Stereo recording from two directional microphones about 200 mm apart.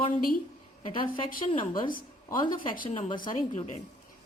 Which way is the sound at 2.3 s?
45° left (ahead or behind).